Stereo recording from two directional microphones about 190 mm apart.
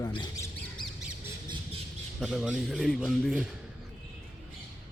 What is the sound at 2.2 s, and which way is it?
A man's voice, 5° right (ahead or behind).